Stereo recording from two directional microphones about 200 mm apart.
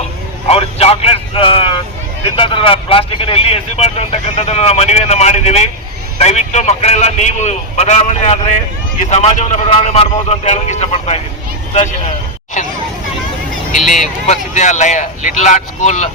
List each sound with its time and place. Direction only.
0.4 s vehicle: 30° left (ahead or behind)
2.3 s speech: 25° left (ahead or behind)
12.6 s speech: 35° left (ahead or behind)
13.7 s speech: 40° left (ahead or behind)